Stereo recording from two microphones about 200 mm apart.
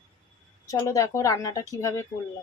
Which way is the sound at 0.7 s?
15° left (ahead or behind).